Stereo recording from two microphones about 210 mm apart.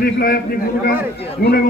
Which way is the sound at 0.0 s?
45° left (ahead or behind).